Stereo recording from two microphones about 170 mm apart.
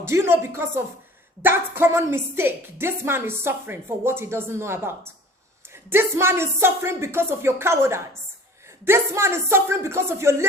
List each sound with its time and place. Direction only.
0.1 s a woman's voice: 15° right (ahead or behind)